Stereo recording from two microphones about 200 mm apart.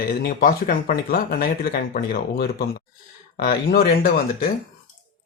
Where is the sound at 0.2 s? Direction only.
45° left (ahead or behind).